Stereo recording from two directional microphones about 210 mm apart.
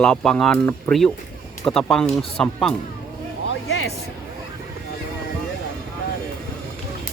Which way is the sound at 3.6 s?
75° left (ahead or behind).